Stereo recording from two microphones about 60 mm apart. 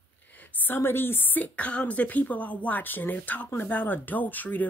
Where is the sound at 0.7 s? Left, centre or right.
Left.